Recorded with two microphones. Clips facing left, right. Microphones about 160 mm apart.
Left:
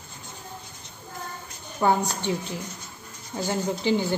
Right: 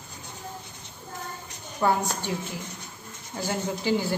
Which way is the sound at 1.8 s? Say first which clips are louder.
Left 2 dB; 10° left (ahead or behind).